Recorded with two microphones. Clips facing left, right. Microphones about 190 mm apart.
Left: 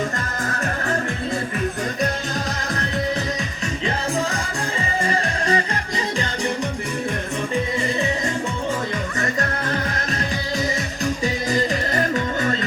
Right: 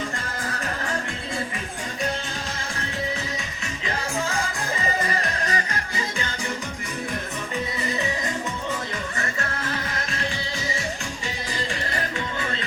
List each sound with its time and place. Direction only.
0.4 s music: 45° left (ahead or behind)
5.0 s music: 30° left (ahead or behind)
11.2 s music: 40° left (ahead or behind)